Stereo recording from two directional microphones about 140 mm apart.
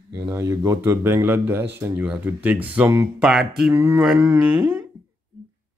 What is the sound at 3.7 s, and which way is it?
Speech, 15° right (ahead or behind).